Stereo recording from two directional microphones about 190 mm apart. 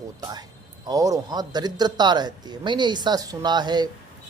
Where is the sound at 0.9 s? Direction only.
20° right (ahead or behind).